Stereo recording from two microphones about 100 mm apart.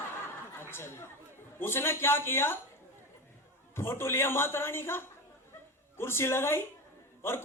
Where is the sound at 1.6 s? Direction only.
25° left (ahead or behind).